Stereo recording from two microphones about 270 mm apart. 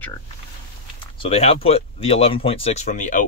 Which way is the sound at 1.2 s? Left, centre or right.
Left.